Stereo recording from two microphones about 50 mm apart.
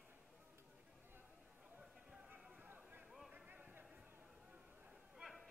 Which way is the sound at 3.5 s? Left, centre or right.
Right.